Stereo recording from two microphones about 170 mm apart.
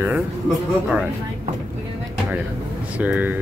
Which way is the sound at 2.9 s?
10° right (ahead or behind).